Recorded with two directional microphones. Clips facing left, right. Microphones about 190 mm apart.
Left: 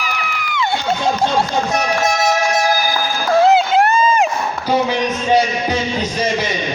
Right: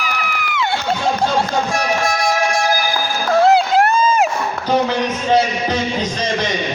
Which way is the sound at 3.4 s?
Centre (ahead or behind).